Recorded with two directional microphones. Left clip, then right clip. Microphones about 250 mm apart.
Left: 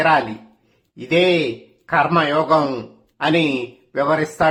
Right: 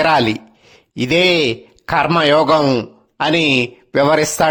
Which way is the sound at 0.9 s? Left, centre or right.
Right.